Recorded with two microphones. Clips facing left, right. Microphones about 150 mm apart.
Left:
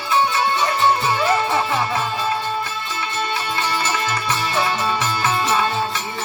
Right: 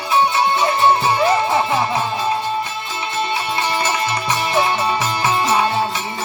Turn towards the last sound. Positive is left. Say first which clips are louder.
# right 3 dB
turn(degrees=-20)  # may be behind; listen again after turning